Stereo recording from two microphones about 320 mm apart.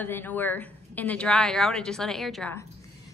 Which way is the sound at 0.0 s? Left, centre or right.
Centre.